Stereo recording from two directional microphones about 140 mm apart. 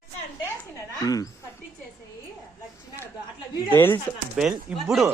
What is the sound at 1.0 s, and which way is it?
Speech, 25° left (ahead or behind).